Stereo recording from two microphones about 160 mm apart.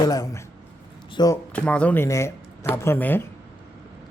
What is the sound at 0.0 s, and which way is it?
Speech, 20° left (ahead or behind).